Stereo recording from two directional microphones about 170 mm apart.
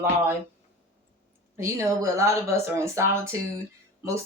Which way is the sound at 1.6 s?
15° right (ahead or behind).